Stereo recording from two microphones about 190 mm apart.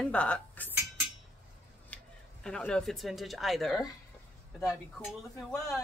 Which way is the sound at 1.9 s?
5° left (ahead or behind).